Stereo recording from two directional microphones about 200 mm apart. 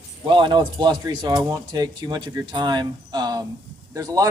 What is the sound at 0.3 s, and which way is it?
Speech, 25° right (ahead or behind).